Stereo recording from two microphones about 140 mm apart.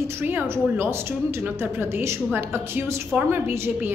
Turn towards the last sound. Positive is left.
turn(degrees=-15)  # may be behind; listen again after turning